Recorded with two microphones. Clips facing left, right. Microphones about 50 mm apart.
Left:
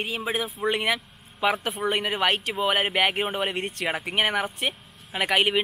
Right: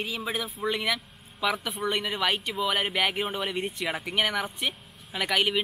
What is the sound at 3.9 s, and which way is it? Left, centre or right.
Speech, left.